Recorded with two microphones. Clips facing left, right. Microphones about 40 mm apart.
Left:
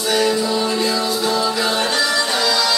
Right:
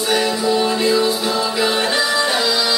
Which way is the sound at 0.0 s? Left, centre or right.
Centre.